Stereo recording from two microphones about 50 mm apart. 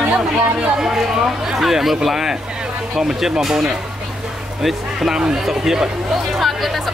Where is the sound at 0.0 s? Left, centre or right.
Right.